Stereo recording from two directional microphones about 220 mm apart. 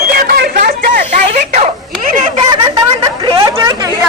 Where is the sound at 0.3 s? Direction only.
40° right (ahead or behind).